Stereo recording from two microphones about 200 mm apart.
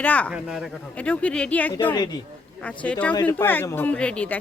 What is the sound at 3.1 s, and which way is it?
Speech, 20° left (ahead or behind).